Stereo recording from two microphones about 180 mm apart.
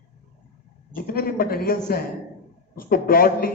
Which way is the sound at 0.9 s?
55° left (ahead or behind).